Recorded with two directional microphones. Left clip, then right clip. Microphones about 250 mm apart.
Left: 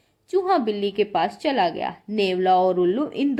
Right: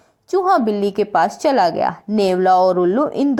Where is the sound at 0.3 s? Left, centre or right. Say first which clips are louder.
Right 5 dB; right.